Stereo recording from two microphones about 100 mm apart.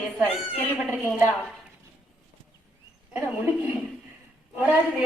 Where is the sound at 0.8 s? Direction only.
15° right (ahead or behind).